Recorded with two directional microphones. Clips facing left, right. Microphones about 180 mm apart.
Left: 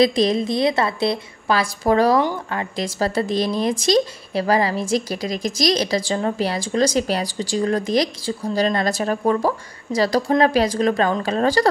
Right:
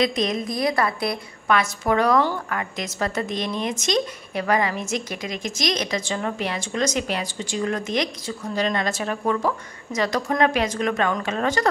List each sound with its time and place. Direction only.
0.0 s speech: 30° left (ahead or behind)